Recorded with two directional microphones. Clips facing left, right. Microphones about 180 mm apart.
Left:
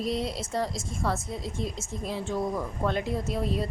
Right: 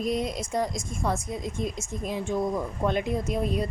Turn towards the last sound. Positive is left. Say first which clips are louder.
# right 2 dB
turn(degrees=-15)  # may be behind; listen again after turning